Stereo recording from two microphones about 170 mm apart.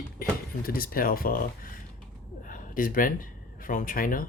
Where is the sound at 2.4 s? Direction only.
50° left (ahead or behind).